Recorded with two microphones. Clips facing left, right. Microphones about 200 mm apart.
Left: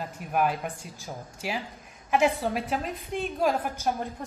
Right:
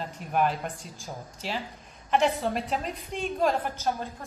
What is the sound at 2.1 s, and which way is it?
A woman's voice, 5° left (ahead or behind).